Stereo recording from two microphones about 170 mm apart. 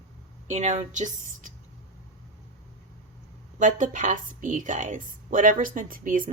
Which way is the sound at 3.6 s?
50° right (ahead or behind).